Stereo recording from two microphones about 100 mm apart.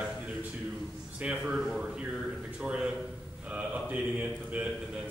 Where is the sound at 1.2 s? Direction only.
10° right (ahead or behind).